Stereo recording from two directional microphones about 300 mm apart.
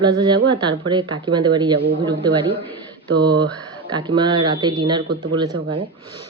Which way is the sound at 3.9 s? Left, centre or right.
Centre.